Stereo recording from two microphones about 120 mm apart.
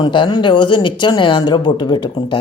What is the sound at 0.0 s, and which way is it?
Speech, 40° left (ahead or behind).